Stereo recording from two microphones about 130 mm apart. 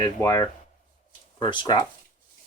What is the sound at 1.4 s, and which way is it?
Speech, 35° left (ahead or behind).